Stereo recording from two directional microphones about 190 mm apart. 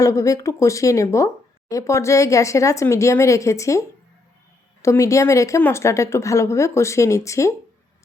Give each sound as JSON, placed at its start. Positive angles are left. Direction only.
{"t": 0.0, "sound": "a woman's voice", "side_deg": 15}